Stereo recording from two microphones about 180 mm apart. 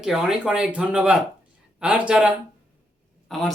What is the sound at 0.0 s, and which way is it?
Speech, 5° right (ahead or behind).